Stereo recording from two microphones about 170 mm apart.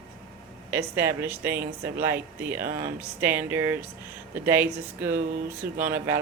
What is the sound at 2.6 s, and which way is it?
Speech, 55° right (ahead or behind).